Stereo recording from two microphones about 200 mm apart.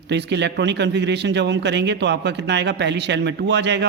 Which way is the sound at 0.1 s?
60° right (ahead or behind).